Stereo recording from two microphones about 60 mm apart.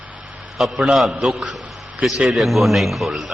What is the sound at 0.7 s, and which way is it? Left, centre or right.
Speech, centre.